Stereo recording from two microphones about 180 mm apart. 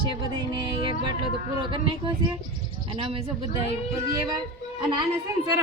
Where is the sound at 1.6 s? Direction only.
25° right (ahead or behind).